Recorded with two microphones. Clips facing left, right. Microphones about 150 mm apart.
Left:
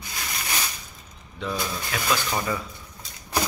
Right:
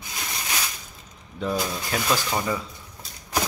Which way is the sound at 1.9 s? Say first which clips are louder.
Right 4 dB; 40° right (ahead or behind).